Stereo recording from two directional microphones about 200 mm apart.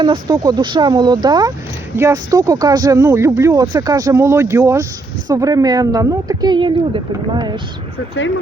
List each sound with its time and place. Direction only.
0.0 s a woman's voice: 20° right (ahead or behind)